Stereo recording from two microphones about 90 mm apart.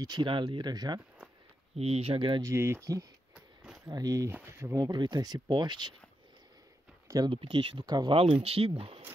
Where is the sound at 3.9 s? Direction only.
45° right (ahead or behind).